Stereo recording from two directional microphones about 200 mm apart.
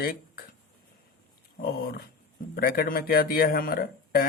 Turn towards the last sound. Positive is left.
turn(degrees=50)  # may be behind; listen again after turning